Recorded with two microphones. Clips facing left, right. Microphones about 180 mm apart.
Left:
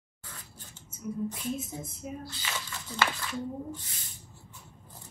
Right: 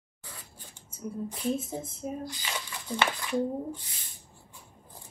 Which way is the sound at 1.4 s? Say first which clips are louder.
Right 4 dB; 30° right (ahead or behind).